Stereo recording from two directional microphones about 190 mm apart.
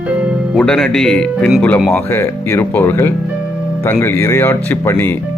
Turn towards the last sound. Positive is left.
turn(degrees=10)  # may be behind; listen again after turning